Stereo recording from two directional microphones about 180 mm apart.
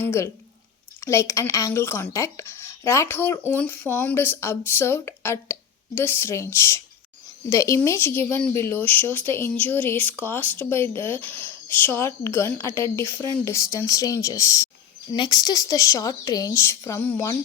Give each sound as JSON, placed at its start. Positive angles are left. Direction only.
{"t": 0.0, "sound": "speech", "side_deg": 15}